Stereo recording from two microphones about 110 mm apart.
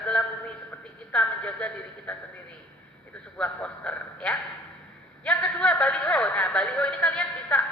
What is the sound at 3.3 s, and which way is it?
A man's voice, 10° left (ahead or behind).